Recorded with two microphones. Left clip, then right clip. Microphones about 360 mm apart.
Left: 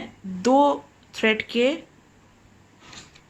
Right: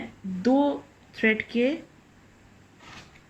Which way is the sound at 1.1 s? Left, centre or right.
Centre.